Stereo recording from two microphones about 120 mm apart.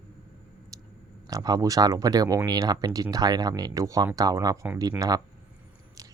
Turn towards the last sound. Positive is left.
turn(degrees=-30)  # may be behind; listen again after turning